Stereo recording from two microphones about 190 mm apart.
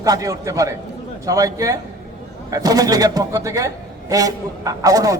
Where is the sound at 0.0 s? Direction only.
20° right (ahead or behind).